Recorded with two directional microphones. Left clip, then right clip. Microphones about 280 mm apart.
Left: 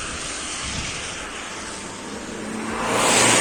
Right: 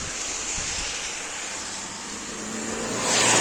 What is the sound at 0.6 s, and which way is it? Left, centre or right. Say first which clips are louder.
Waves: left 1 dB; left.